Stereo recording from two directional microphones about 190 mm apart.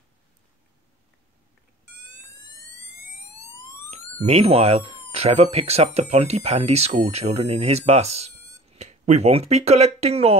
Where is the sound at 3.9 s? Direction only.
35° right (ahead or behind).